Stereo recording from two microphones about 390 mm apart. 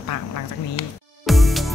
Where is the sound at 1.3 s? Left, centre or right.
Centre.